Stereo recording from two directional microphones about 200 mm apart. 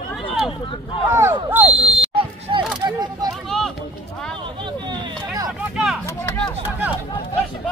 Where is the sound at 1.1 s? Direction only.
10° right (ahead or behind).